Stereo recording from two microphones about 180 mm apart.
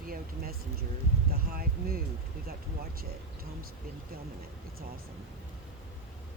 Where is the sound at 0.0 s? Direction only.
55° right (ahead or behind).